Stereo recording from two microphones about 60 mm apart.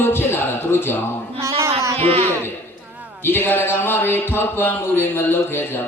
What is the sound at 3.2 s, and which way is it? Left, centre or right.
Speech, left.